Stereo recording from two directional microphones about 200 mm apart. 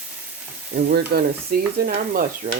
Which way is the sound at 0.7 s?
50° right (ahead or behind).